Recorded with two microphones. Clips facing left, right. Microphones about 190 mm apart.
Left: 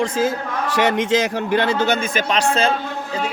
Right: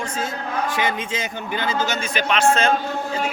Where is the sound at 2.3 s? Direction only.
35° left (ahead or behind).